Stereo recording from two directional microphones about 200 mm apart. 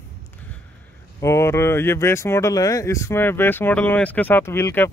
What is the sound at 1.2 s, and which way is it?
Speech, 15° left (ahead or behind).